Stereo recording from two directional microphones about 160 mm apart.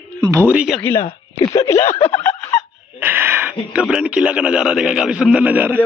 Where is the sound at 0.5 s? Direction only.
10° right (ahead or behind).